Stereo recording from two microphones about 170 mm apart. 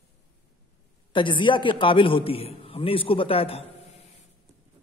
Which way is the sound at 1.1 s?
30° left (ahead or behind).